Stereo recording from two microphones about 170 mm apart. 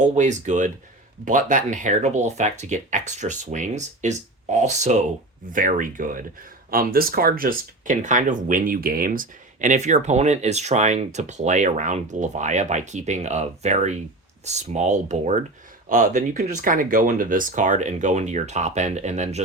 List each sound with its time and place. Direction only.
0.0 s speech: 45° right (ahead or behind)